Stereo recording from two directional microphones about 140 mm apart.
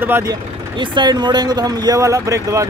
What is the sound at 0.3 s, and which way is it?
Speech, 30° right (ahead or behind).